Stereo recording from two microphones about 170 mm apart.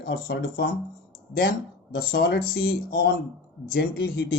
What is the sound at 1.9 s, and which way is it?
Speech, 65° left (ahead or behind).